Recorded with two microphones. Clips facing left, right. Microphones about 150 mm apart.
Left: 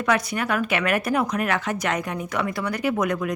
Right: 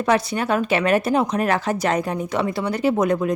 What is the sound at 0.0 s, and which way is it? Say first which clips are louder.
Speech: right 3 dB; 30° right (ahead or behind).